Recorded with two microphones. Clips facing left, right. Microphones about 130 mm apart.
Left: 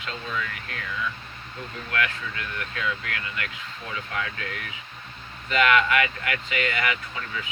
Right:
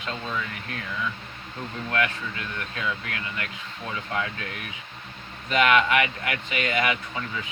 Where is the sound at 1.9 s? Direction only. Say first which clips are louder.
Right 1 dB; 20° right (ahead or behind).